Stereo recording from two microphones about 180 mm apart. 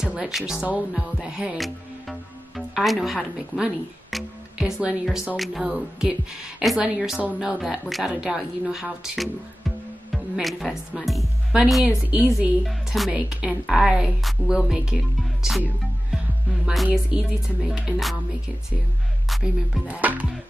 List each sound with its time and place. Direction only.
0.0 s a woman's voice: 5° right (ahead or behind)
15.4 s music: 5° right (ahead or behind)
16.6 s a woman's voice: centre (ahead or behind)
19.2 s music: 5° right (ahead or behind)